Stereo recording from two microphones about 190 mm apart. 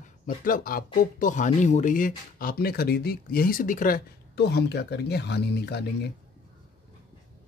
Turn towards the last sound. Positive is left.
turn(degrees=60)  # may be behind; listen again after turning